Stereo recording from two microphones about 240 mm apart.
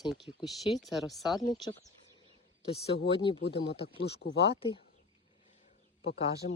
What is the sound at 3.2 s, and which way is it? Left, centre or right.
Speech, left.